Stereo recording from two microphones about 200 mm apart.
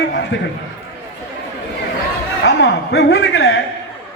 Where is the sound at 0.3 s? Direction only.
70° left (ahead or behind).